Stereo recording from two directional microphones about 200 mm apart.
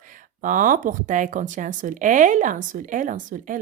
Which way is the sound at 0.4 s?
40° right (ahead or behind).